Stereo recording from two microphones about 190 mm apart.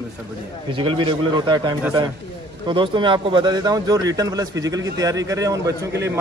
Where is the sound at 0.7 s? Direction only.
25° right (ahead or behind).